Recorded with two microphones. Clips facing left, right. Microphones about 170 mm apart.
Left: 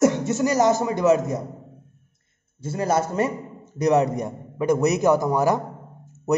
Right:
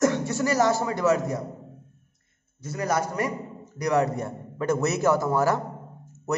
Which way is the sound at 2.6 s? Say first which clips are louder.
Left 4 dB; 25° left (ahead or behind).